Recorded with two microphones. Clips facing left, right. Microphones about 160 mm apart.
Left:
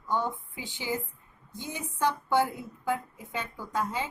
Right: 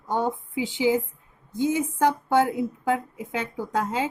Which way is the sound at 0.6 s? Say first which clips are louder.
Right 14 dB; 15° right (ahead or behind).